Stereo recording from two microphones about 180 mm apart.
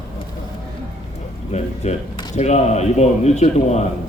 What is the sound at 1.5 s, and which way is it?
A man's voice, 35° left (ahead or behind).